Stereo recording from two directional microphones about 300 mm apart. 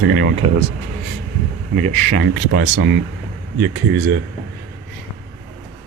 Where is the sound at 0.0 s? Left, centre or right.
Right.